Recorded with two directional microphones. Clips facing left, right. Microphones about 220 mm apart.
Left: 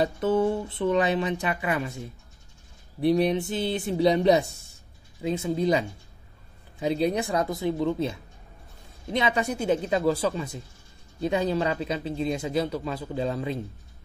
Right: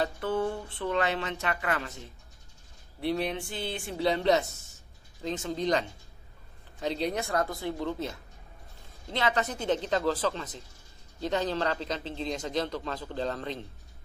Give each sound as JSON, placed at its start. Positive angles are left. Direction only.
{"t": 0.0, "sound": "speech", "side_deg": 20}
{"t": 3.1, "sound": "speech", "side_deg": 20}